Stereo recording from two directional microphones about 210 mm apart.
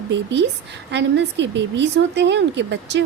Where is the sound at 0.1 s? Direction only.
55° right (ahead or behind).